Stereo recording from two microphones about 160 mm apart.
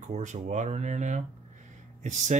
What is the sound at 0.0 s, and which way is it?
Speech, 50° right (ahead or behind).